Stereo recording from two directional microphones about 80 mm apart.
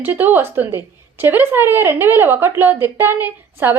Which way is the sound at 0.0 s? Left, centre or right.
Right.